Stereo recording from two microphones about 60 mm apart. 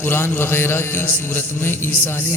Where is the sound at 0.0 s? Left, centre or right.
Left.